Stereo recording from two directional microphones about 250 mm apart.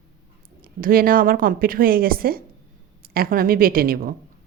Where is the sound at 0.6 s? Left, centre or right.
Right.